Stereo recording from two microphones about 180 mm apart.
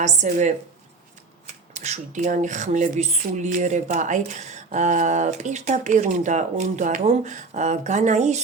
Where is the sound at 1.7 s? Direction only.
40° right (ahead or behind).